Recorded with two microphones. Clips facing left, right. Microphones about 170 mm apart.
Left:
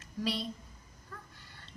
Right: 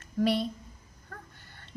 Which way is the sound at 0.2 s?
55° right (ahead or behind).